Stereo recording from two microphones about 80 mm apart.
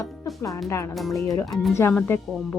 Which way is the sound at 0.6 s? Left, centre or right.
Left.